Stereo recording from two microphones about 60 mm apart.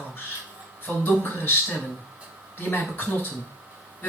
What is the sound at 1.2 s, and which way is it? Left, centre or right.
Speech, left.